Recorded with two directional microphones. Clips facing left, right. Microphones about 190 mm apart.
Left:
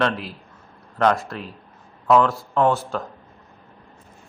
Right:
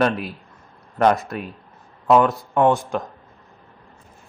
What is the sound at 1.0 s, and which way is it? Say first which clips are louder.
Speech: right 2 dB; 20° right (ahead or behind).